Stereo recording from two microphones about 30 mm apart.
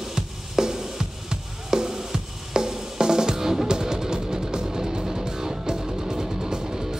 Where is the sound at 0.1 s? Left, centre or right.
Centre.